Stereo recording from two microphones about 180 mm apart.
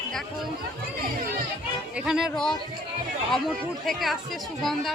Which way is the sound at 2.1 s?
Centre (ahead or behind).